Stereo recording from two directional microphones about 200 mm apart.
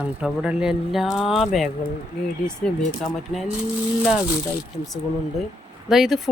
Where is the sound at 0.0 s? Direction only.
5° right (ahead or behind).